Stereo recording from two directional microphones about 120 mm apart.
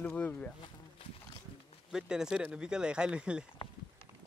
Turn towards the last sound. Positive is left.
turn(degrees=-10)  # may be behind; listen again after turning